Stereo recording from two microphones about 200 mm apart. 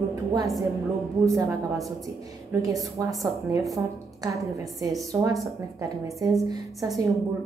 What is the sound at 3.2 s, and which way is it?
A woman's voice, 15° right (ahead or behind).